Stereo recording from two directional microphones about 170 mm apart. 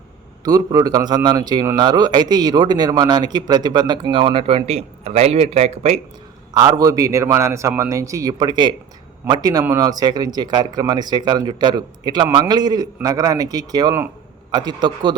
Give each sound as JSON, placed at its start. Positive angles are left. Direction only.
{"t": 0.4, "sound": "a man's voice", "side_deg": -20}
{"t": 6.5, "sound": "a man's voice", "side_deg": -20}